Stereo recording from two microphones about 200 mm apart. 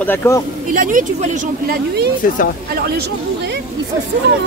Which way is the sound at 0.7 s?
40° right (ahead or behind).